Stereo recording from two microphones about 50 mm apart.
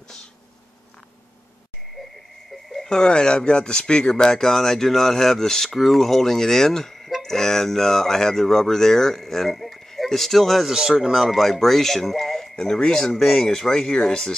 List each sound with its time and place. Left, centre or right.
2.7 s speech: centre
10.7 s speech: centre
11.1 s speech: centre